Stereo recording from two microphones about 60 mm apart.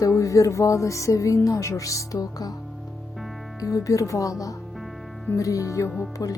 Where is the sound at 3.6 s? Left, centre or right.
Left.